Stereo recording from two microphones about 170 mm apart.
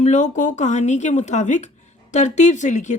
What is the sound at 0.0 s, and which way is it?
A woman's voice, 45° left (ahead or behind).